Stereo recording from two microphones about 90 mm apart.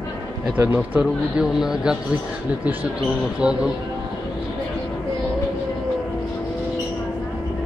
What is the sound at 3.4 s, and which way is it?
Speech, 10° right (ahead or behind).